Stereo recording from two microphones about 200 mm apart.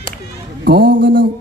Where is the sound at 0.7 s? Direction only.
50° right (ahead or behind).